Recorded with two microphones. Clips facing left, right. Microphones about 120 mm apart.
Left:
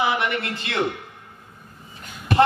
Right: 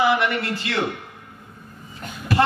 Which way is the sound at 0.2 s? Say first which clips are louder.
Right 2 dB; 25° left (ahead or behind).